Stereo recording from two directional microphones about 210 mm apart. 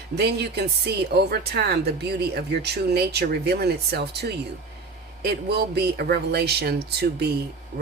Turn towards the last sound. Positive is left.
turn(degrees=-40)  # may be behind; listen again after turning